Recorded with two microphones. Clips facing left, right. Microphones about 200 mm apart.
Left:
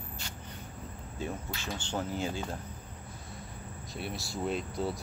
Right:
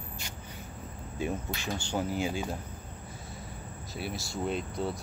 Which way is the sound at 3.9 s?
Centre (ahead or behind).